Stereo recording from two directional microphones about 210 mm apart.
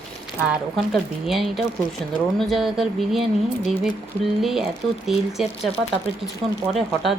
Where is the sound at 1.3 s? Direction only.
Centre (ahead or behind).